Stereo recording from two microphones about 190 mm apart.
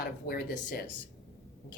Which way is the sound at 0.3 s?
55° left (ahead or behind).